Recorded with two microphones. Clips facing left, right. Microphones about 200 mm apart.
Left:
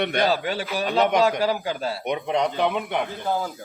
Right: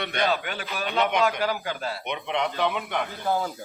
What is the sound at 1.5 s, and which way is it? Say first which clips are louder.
Speech: left 4 dB; 20° left (ahead or behind).